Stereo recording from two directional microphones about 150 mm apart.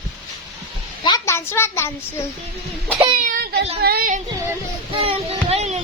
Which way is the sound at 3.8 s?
90° right.